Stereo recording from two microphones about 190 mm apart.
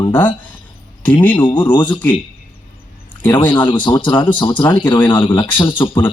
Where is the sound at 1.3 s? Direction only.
25° left (ahead or behind).